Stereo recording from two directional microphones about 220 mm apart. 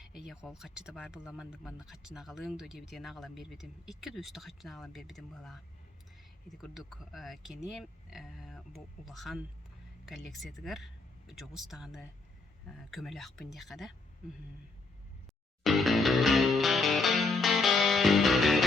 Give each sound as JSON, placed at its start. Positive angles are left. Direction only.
{"t": 0.0, "sound": "speech", "side_deg": 0}
{"t": 10.6, "sound": "speech", "side_deg": 0}
{"t": 15.6, "sound": "music", "side_deg": 0}